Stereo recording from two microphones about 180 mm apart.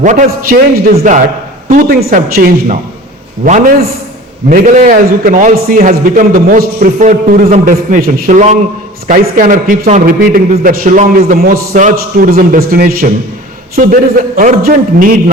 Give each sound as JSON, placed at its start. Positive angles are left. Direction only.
{"t": 0.0, "sound": "a man's voice", "side_deg": -45}
{"t": 1.7, "sound": "a man's voice", "side_deg": -55}